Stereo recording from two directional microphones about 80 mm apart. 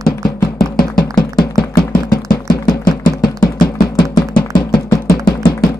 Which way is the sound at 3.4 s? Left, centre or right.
Left.